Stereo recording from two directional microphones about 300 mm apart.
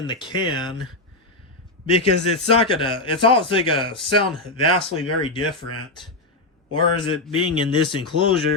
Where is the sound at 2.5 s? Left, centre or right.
Centre.